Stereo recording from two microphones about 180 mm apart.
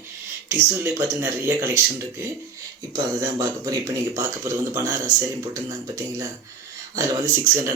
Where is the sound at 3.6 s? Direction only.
20° right (ahead or behind).